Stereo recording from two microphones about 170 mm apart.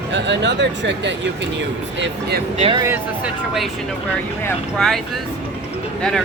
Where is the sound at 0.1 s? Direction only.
90° right.